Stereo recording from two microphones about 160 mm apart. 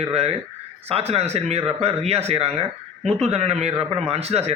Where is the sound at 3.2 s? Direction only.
40° right (ahead or behind).